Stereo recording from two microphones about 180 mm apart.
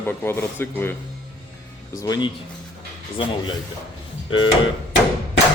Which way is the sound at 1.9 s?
20° left (ahead or behind).